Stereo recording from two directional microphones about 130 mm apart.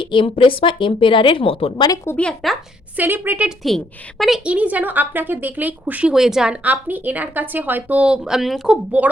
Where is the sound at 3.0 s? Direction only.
15° right (ahead or behind).